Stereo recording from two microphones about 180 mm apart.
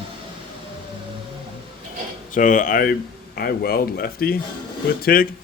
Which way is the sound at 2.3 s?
45° left (ahead or behind).